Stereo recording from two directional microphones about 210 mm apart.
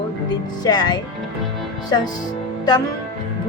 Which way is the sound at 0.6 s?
20° left (ahead or behind).